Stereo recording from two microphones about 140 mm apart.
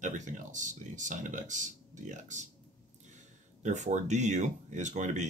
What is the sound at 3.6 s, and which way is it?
Speech, 60° right (ahead or behind).